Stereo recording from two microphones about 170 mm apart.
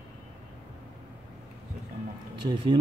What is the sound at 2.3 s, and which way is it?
Speech, 25° right (ahead or behind).